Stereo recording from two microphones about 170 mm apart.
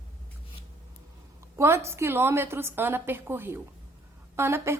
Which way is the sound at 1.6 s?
15° right (ahead or behind).